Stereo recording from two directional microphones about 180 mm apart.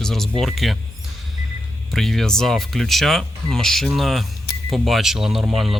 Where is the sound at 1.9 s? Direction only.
Centre (ahead or behind).